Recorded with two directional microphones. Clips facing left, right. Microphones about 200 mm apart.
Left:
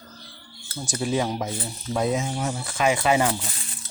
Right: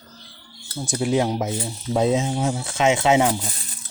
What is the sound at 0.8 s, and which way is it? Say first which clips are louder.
Speech: right 4 dB; 15° right (ahead or behind).